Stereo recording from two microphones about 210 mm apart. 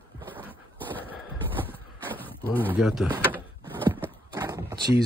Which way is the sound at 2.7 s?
Centre (ahead or behind).